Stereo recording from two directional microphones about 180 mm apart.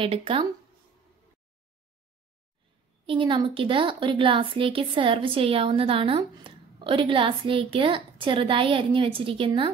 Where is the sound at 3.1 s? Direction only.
25° right (ahead or behind).